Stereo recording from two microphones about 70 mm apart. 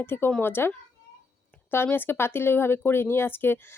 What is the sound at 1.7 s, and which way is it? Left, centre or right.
Speech, left.